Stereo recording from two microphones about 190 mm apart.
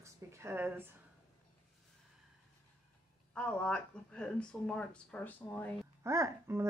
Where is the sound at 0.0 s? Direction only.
15° right (ahead or behind).